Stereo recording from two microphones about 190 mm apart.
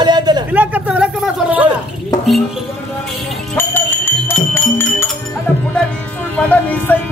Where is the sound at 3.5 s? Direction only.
10° left (ahead or behind).